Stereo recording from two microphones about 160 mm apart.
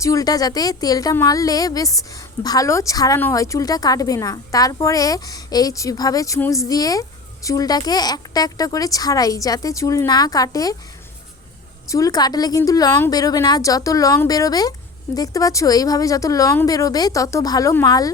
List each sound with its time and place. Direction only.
0.0 s a woman's voice: 20° left (ahead or behind)
11.9 s a woman's voice: 20° left (ahead or behind)